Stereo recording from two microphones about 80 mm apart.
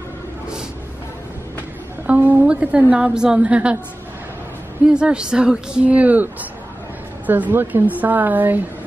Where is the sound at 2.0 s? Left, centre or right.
Right.